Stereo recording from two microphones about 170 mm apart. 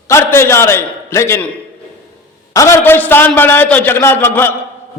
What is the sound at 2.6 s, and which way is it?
A man's voice, 15° left (ahead or behind).